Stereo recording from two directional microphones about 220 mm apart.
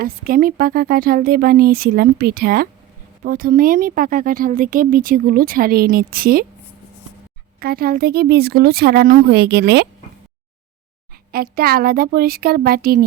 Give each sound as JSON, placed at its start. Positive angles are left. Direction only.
{"t": 0.0, "sound": "speech", "side_deg": -40}
{"t": 7.6, "sound": "a woman's voice", "side_deg": -45}
{"t": 11.5, "sound": "a woman's voice", "side_deg": -45}